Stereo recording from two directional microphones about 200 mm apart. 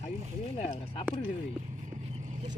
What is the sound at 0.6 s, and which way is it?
Speech, 35° left (ahead or behind).